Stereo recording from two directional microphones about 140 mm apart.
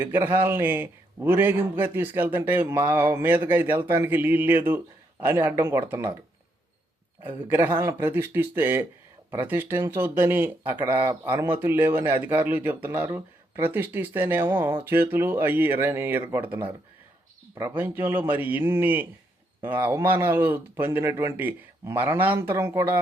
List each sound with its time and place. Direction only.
0.0 s a man's voice: 15° right (ahead or behind)
7.5 s a man's voice: 15° right (ahead or behind)